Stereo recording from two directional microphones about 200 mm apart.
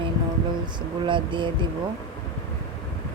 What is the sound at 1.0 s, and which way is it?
Speech, 25° right (ahead or behind).